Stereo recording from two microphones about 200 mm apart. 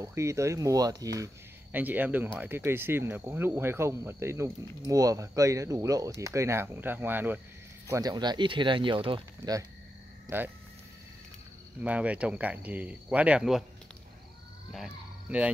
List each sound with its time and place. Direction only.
0.0 s speech: 15° right (ahead or behind)
11.8 s speech: 5° right (ahead or behind)
14.7 s speech: 5° right (ahead or behind)